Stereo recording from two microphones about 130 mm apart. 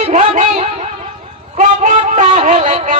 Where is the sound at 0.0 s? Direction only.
70° right (ahead or behind).